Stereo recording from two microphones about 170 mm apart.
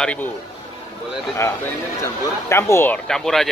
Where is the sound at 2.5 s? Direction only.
15° left (ahead or behind).